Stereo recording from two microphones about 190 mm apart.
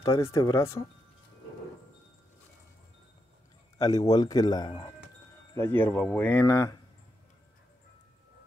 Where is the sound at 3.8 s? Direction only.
20° left (ahead or behind).